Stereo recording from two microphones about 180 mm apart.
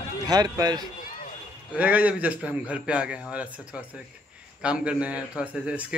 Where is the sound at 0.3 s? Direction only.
20° right (ahead or behind).